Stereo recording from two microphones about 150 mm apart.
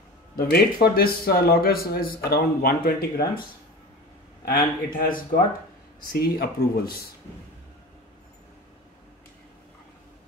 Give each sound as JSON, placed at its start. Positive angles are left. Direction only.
{"t": 0.4, "sound": "speech", "side_deg": 85}
{"t": 4.5, "sound": "speech", "side_deg": 65}
{"t": 6.1, "sound": "speech", "side_deg": 90}